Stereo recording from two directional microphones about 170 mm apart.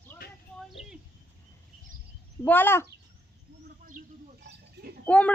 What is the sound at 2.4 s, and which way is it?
Speech, 10° left (ahead or behind).